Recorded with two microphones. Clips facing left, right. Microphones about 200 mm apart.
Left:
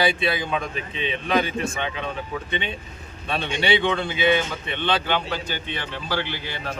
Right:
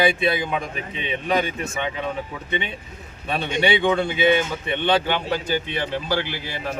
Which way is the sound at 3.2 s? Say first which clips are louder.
Right 2 dB; 15° right (ahead or behind).